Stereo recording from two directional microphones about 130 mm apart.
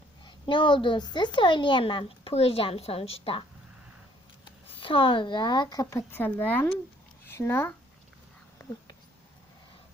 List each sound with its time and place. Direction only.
0.3 s a child's voice: 40° left (ahead or behind)
4.8 s a child's voice: 40° left (ahead or behind); by 7.7 s 20° left (ahead or behind)